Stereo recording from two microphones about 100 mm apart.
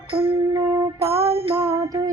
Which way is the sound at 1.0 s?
75° right (ahead or behind).